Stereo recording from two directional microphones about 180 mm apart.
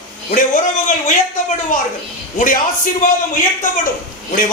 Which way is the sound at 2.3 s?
50° left (ahead or behind).